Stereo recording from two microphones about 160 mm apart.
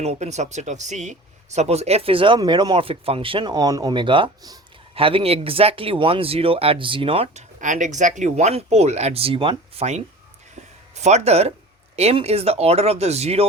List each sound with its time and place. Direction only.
0.0 s speech: 45° right (ahead or behind)
7.6 s speech: 50° right (ahead or behind); by 9.8 s 35° right (ahead or behind)
10.9 s speech: 45° right (ahead or behind)